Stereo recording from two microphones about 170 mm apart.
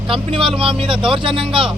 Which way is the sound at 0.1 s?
30° right (ahead or behind).